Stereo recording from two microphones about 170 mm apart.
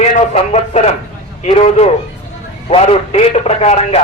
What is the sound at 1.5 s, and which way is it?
A man's voice, 40° left (ahead or behind).